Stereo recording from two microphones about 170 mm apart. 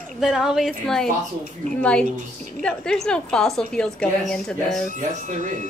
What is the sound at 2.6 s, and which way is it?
A woman's voice, 5° left (ahead or behind).